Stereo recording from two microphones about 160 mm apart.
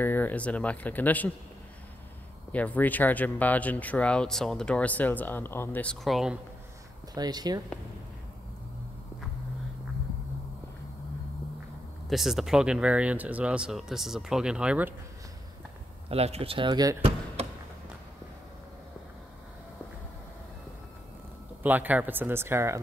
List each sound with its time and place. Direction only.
0.0 s speech: 10° left (ahead or behind)
2.5 s speech: 10° left (ahead or behind)
7.2 s speech: 25° right (ahead or behind)
12.1 s speech: centre (ahead or behind)
16.1 s speech: 40° right (ahead or behind)
21.6 s speech: 10° right (ahead or behind)